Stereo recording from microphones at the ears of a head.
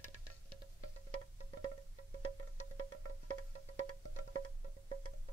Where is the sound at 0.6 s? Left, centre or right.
Right.